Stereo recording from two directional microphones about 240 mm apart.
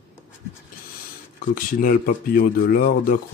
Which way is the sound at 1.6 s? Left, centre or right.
Left.